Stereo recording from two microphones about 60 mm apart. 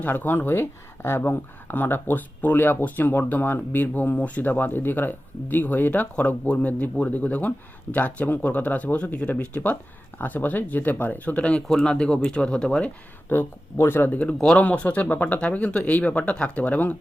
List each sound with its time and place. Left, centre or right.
0.1 s speech: left
11.7 s speech: centre
13.2 s speech: left
14.5 s speech: left